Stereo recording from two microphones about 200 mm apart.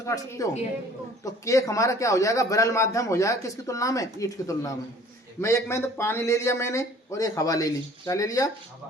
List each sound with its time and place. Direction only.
0.0 s a man's voice: 15° left (ahead or behind)